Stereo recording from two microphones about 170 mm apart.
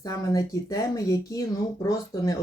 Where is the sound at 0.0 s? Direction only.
20° left (ahead or behind).